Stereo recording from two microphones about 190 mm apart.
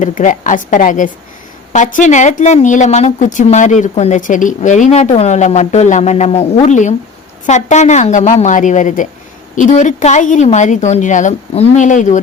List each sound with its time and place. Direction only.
0.0 s a woman's voice: 40° left (ahead or behind)